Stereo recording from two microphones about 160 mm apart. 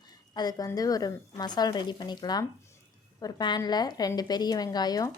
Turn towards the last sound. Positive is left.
turn(degrees=25)  # may be behind; listen again after turning